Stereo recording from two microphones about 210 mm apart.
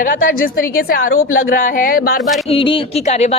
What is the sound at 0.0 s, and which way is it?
A woman's voice, 40° left (ahead or behind).